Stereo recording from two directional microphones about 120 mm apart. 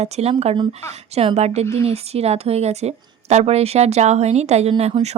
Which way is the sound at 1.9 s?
60° right (ahead or behind).